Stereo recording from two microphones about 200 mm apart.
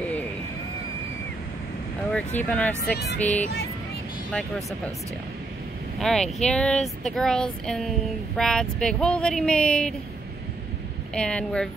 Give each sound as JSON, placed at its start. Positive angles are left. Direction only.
{"t": 2.1, "sound": "speech", "side_deg": 5}
{"t": 2.9, "sound": "music", "side_deg": 55}
{"t": 3.2, "sound": "speech", "side_deg": 5}
{"t": 5.9, "sound": "speech", "side_deg": 0}
{"t": 11.1, "sound": "speech", "side_deg": 5}